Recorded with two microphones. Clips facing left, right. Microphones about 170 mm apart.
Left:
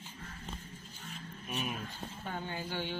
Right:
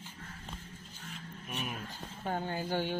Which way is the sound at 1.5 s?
Centre (ahead or behind).